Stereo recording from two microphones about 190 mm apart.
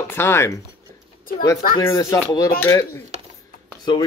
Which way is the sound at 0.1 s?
15° left (ahead or behind).